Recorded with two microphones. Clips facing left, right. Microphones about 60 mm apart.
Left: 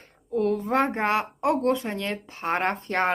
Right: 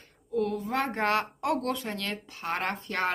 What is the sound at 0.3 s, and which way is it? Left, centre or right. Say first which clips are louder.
A woman's voice: left 5 dB; left.